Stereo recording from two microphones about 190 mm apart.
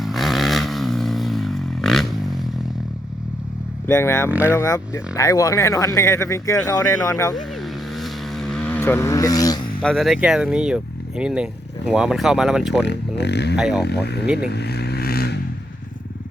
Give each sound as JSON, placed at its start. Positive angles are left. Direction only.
{"t": 0.0, "sound": "vehicle", "side_deg": 0}
{"t": 3.8, "sound": "speech", "side_deg": 15}
{"t": 4.3, "sound": "speech", "side_deg": -10}
{"t": 4.5, "sound": "speech", "side_deg": 15}
{"t": 7.9, "sound": "vehicle", "side_deg": 0}
{"t": 9.8, "sound": "speech", "side_deg": 0}
{"t": 12.8, "sound": "speech", "side_deg": 65}
{"t": 13.6, "sound": "speech", "side_deg": -5}
{"t": 13.8, "sound": "speech", "side_deg": 60}
{"t": 14.3, "sound": "vehicle", "side_deg": 60}